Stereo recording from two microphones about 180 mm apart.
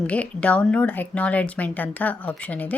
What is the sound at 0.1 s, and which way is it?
Speech, 5° left (ahead or behind).